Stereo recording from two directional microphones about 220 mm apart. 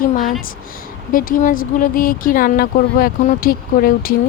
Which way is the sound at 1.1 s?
40° left (ahead or behind).